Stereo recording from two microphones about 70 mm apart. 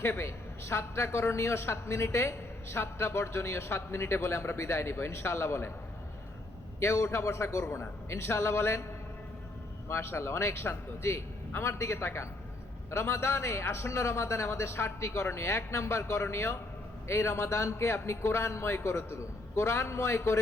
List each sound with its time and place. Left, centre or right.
0.0 s a man's voice: left
6.7 s a man's voice: left
9.9 s a man's voice: left